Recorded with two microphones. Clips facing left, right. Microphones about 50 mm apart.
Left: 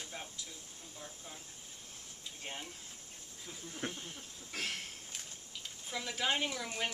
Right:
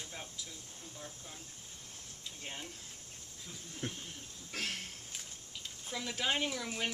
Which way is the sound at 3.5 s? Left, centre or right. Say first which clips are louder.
Left 1 dB; centre.